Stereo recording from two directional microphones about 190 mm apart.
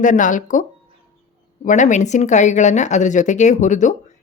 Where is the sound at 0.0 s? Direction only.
40° left (ahead or behind).